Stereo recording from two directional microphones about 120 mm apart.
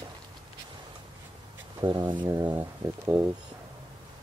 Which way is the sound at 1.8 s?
40° right (ahead or behind).